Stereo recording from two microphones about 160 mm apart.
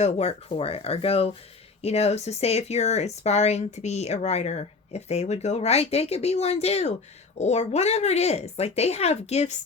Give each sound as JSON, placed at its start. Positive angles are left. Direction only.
{"t": 0.0, "sound": "speech", "side_deg": 40}